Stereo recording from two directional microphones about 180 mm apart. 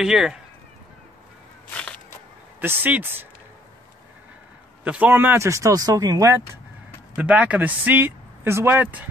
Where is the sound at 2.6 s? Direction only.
10° right (ahead or behind).